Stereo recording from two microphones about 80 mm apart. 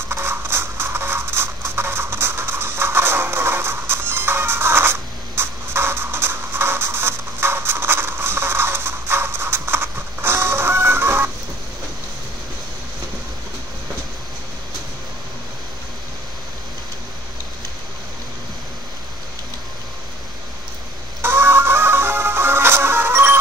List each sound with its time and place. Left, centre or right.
0.1 s scratch: right
21.2 s music: right